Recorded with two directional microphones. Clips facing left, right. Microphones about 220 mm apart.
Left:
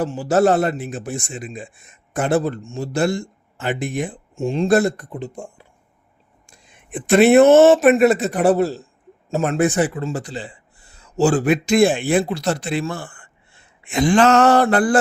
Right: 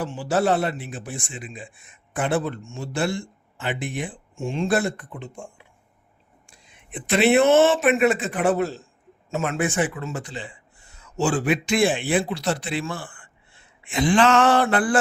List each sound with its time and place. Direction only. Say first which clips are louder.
0.0 s a man's voice: left 6 dB; 40° left (ahead or behind)